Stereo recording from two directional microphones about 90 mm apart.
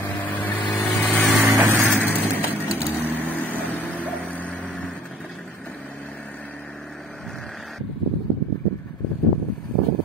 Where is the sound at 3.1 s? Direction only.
20° left (ahead or behind).